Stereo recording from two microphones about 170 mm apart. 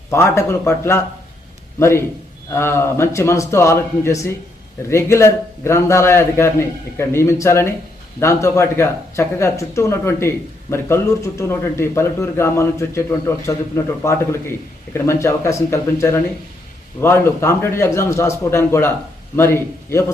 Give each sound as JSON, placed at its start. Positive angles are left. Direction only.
{"t": 0.1, "sound": "speech", "side_deg": 15}